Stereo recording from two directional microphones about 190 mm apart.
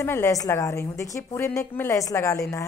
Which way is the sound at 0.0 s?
15° left (ahead or behind).